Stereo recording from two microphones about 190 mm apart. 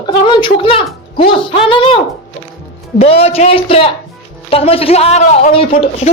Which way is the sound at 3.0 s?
30° left (ahead or behind).